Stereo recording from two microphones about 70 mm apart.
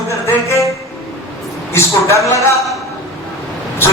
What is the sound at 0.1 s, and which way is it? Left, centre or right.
Music, left.